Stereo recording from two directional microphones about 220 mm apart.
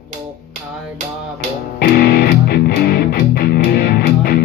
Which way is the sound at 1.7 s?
45° left (ahead or behind).